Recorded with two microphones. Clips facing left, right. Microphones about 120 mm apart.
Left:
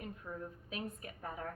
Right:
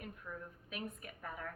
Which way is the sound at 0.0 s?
30° left (ahead or behind).